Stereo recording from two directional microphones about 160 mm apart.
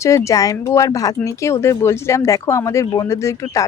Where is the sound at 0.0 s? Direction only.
20° left (ahead or behind).